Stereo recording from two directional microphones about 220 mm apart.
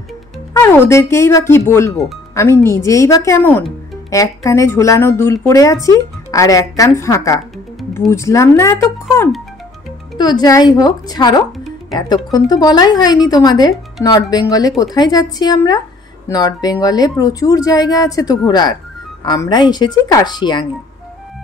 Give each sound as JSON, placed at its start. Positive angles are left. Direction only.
{"t": 0.5, "sound": "speech", "side_deg": 10}
{"t": 10.1, "sound": "speech", "side_deg": 20}